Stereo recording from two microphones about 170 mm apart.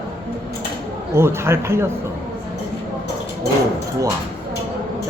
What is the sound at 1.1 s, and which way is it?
Speech, 15° right (ahead or behind).